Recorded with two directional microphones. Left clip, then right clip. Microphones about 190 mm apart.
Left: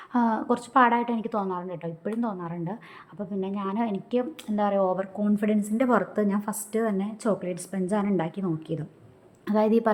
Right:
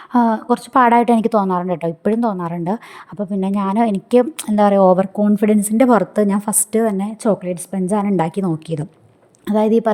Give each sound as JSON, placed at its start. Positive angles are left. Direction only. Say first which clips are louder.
{"t": 0.1, "sound": "a woman's voice", "louder": "right 9 dB", "side_deg": -45}
{"t": 9.5, "sound": "a woman's voice", "louder": "right 7 dB", "side_deg": -35}